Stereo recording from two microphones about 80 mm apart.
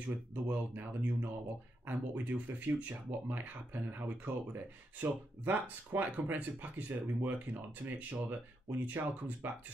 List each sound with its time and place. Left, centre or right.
0.3 s speech: right